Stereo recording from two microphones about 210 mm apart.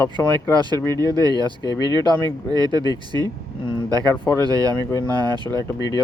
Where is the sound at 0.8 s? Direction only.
15° right (ahead or behind).